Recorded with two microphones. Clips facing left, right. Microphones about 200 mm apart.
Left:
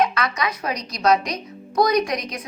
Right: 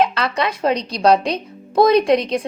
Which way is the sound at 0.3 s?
30° right (ahead or behind).